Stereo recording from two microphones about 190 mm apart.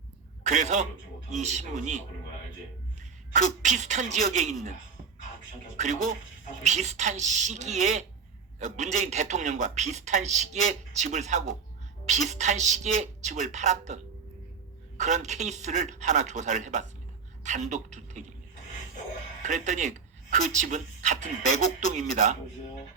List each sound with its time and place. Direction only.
0.4 s a man's voice: 40° right (ahead or behind)
3.3 s a man's voice: 40° right (ahead or behind)
5.7 s a man's voice: 40° right (ahead or behind)
19.4 s a man's voice: 40° right (ahead or behind)